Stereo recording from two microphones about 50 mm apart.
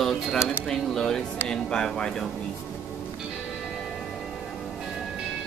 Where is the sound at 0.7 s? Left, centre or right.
Centre.